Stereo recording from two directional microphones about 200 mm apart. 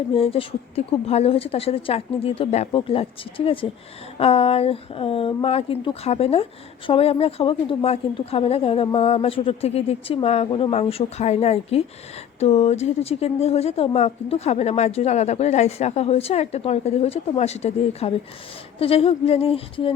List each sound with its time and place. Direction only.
0.1 s a woman's voice: 30° left (ahead or behind)